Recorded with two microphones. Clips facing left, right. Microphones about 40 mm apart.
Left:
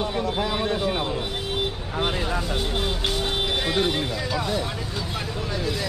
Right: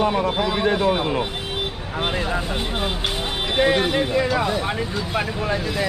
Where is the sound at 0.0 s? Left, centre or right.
Right.